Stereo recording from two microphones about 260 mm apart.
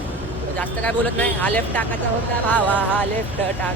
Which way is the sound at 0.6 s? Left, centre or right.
Centre.